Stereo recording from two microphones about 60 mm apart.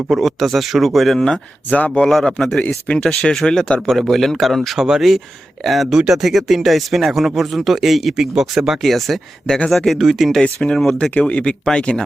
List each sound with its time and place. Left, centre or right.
0.1 s speech: centre
2.6 s speech: centre
3.0 s speech: centre
10.4 s speech: centre